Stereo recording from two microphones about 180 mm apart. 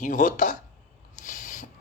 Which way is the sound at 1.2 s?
45° left (ahead or behind).